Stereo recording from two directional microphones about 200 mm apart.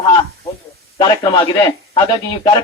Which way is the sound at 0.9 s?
20° left (ahead or behind).